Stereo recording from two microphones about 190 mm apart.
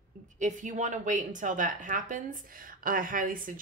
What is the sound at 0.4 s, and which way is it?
Speech, 40° right (ahead or behind).